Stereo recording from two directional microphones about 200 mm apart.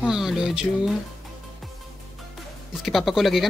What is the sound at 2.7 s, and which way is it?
Speech, centre (ahead or behind).